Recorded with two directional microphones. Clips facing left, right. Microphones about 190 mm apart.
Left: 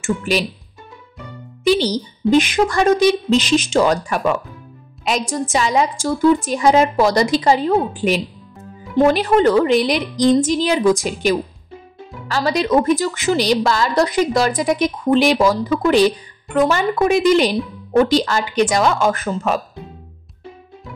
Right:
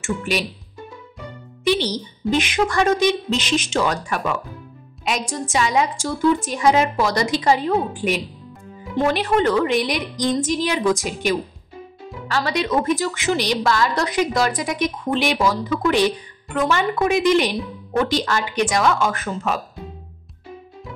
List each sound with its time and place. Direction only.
0.0 s a woman's voice: 35° left (ahead or behind)
1.7 s a woman's voice: 35° left (ahead or behind)
5.5 s a woman's voice: 35° left (ahead or behind)